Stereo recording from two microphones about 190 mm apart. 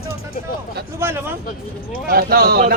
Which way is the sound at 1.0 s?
10° right (ahead or behind).